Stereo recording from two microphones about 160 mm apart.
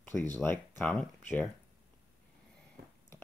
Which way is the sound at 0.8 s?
Centre (ahead or behind).